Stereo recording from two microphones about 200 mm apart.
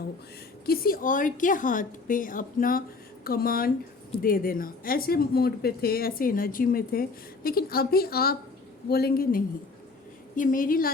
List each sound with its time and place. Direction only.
0.6 s speech: 50° left (ahead or behind)